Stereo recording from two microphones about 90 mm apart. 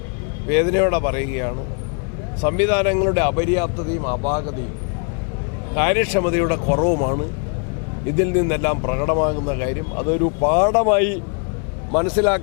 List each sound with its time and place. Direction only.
0.4 s speech: 15° left (ahead or behind)
5.7 s speech: 15° left (ahead or behind)